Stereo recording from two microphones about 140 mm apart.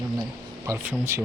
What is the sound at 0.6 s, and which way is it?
Speech, 20° right (ahead or behind).